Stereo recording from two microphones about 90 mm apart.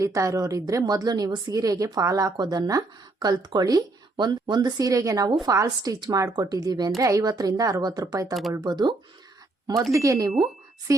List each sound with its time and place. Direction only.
0.0 s a woman's voice: 35° right (ahead or behind)
2.3 s speech: 50° right (ahead or behind)
4.9 s a woman's voice: 40° right (ahead or behind)
7.0 s speech: 40° right (ahead or behind); by 9.0 s 55° right (ahead or behind)
9.9 s a woman's voice: 35° right (ahead or behind)